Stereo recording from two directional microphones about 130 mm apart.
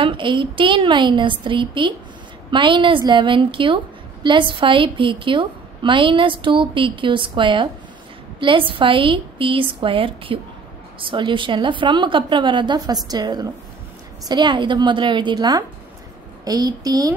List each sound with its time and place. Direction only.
0.0 s a woman's voice: 40° right (ahead or behind)